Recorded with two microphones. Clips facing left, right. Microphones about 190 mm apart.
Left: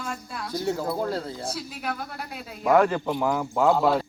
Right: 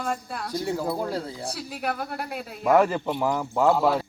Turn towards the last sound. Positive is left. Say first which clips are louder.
# even
turn(degrees=-5)  # may be behind; listen again after turning